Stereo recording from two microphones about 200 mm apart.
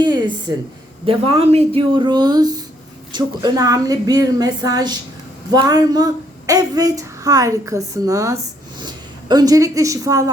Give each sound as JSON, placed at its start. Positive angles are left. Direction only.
{"t": 0.0, "sound": "a woman's voice", "side_deg": -20}